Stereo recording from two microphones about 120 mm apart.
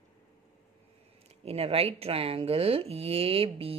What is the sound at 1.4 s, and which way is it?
Speech, 55° right (ahead or behind).